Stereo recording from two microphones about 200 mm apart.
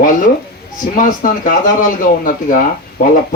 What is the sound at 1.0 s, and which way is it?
Speech, 40° left (ahead or behind).